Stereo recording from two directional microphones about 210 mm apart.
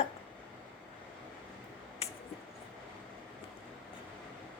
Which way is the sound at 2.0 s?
30° left (ahead or behind).